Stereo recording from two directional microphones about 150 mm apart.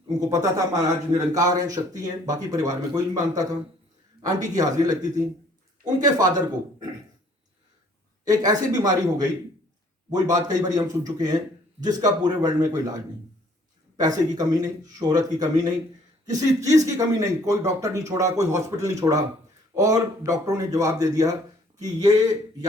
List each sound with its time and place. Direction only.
0.2 s speech: 25° right (ahead or behind)
8.2 s speech: 25° right (ahead or behind)